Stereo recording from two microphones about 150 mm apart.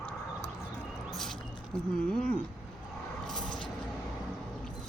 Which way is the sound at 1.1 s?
Centre (ahead or behind).